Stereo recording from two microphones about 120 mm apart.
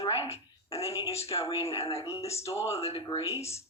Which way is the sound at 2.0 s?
25° left (ahead or behind).